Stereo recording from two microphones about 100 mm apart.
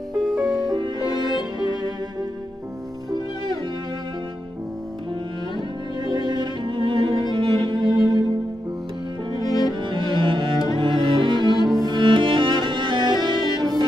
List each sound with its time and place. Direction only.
0.7 s music: 50° right (ahead or behind)
1.2 s violin: 45° right (ahead or behind)
5.9 s cello: 45° right (ahead or behind)
9.4 s music: 40° left (ahead or behind)
9.8 s music: 55° right (ahead or behind)
10.2 s cello: 55° right (ahead or behind)